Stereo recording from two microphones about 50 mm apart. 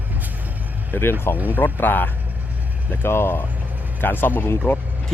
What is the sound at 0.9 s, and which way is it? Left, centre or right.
Speech, left.